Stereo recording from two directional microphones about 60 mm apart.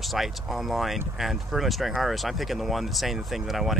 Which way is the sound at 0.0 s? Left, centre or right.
Centre.